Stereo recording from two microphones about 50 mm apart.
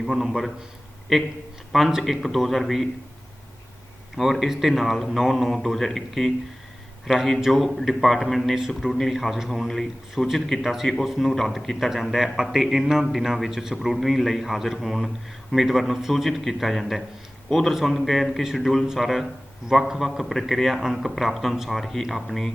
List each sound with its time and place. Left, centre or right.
0.0 s a man's voice: centre
4.4 s a man's voice: centre
7.4 s a man's voice: centre